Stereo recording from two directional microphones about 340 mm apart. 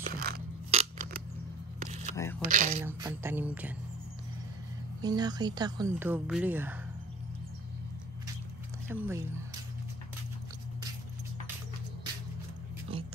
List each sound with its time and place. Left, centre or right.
0.0 s a sound: right
2.4 s speech: right
2.8 s speech: centre
5.0 s speech: centre
8.8 s speech: centre